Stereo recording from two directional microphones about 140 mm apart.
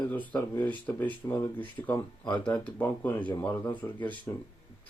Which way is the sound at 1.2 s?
25° left (ahead or behind).